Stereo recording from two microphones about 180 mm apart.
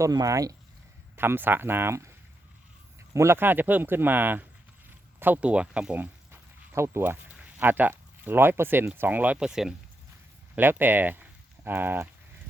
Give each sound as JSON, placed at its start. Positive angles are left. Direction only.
{"t": 0.0, "sound": "speech", "side_deg": -20}